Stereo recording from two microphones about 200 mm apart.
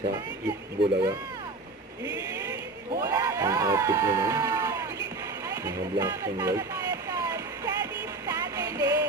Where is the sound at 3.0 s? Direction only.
15° right (ahead or behind).